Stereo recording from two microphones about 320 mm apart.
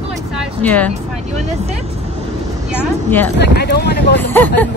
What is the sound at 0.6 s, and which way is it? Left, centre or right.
Speech, centre.